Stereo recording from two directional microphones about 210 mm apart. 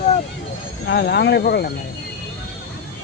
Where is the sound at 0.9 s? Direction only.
50° left (ahead or behind).